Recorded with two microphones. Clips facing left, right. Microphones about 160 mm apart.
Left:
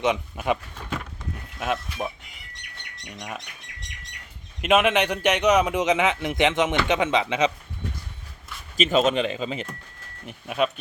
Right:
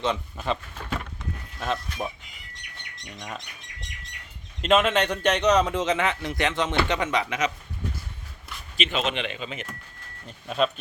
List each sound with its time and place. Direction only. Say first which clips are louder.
0.0 s a man's voice: left 3 dB; 15° left (ahead or behind)
3.2 s a man's voice: left 2 dB; 10° left (ahead or behind)
4.6 s a man's voice: left 1 dB; 10° left (ahead or behind); by 7.5 s 25° left (ahead or behind)
8.7 s speech: left 7 dB; 45° left (ahead or behind)
10.2 s a man's voice: even; 10° left (ahead or behind)